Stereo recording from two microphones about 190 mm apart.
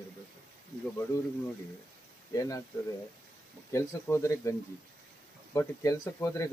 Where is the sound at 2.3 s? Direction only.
15° left (ahead or behind).